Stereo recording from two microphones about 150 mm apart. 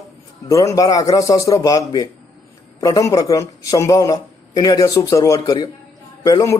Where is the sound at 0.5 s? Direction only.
20° left (ahead or behind).